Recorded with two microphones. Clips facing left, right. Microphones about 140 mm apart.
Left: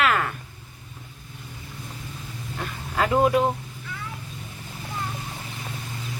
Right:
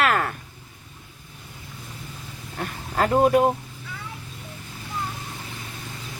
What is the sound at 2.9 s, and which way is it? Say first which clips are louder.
Speech: right 1 dB; 40° right (ahead or behind).